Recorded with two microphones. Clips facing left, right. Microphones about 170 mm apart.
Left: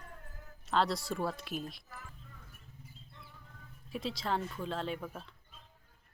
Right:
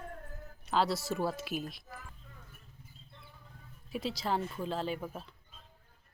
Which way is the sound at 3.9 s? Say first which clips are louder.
Right 2 dB; centre (ahead or behind).